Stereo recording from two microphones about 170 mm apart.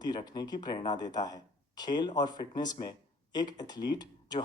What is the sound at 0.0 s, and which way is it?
Speech, 25° left (ahead or behind).